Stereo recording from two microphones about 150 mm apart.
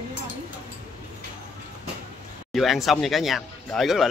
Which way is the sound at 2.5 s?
Centre (ahead or behind).